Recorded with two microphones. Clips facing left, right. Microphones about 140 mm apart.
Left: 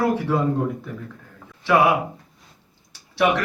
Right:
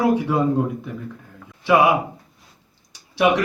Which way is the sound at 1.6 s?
15° right (ahead or behind).